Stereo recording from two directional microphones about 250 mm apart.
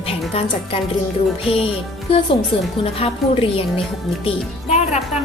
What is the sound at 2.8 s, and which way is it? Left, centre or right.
Speech, left.